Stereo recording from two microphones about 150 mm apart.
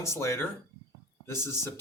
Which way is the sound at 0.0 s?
20° left (ahead or behind).